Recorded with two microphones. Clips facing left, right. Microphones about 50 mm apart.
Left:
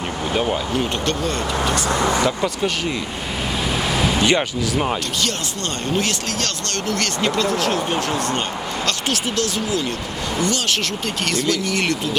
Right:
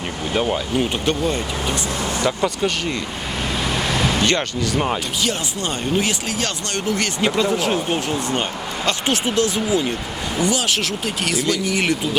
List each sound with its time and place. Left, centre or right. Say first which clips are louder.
0.3 s speech: right 1 dB; centre
1.0 s speech: right 1 dB; centre
2.2 s speech: even; centre
6.0 s speech: right 1 dB; centre
10.3 s speech: right 1 dB; centre